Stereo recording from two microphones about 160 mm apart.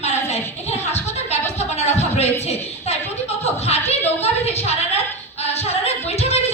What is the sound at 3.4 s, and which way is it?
Chuckle, 40° left (ahead or behind).